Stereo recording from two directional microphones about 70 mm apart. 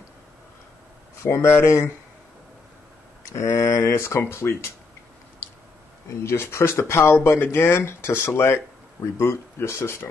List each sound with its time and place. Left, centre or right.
1.2 s speech: left
3.3 s speech: left
6.2 s speech: left